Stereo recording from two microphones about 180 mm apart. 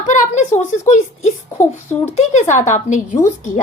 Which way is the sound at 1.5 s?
15° left (ahead or behind).